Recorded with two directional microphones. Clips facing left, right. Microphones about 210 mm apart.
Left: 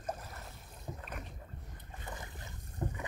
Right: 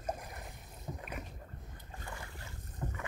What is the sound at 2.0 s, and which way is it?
Boat, 20° left (ahead or behind).